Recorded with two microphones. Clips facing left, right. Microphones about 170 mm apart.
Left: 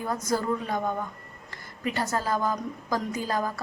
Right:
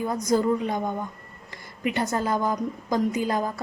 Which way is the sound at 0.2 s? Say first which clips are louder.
Right 5 dB; 20° right (ahead or behind).